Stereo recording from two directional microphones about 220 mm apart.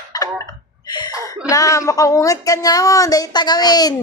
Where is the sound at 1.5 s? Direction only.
15° left (ahead or behind).